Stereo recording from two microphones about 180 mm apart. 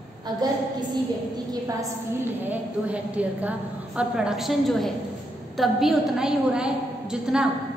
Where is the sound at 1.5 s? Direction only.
20° right (ahead or behind).